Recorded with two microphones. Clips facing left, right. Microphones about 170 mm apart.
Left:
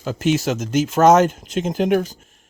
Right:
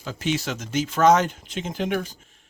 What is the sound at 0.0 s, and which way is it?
Speech, 45° left (ahead or behind).